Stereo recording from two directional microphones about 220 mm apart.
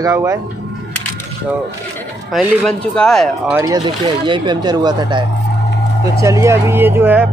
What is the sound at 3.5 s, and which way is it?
Speech, 15° right (ahead or behind).